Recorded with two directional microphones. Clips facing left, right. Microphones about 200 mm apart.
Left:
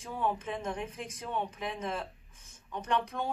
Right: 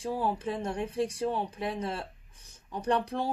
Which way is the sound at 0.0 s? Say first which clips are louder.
Right 3 dB; 35° right (ahead or behind).